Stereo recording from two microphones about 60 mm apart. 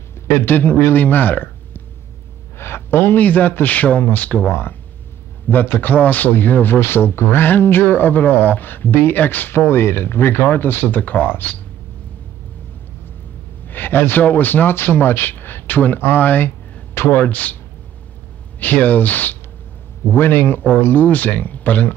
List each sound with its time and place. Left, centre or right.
0.3 s a man's voice: left
4.5 s speech: left
13.7 s speech: left
18.6 s speech: left
20.1 s speech: left